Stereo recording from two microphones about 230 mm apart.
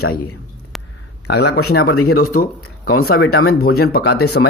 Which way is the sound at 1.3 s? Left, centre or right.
Left.